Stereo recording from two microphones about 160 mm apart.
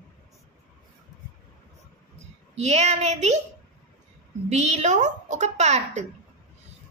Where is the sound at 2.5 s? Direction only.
45° right (ahead or behind).